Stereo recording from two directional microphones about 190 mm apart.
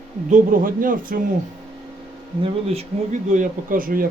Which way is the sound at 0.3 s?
45° right (ahead or behind).